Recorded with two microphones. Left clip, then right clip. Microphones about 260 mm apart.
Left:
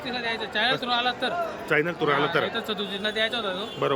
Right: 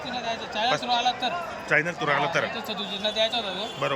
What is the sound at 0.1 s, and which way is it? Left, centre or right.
A man's voice, centre.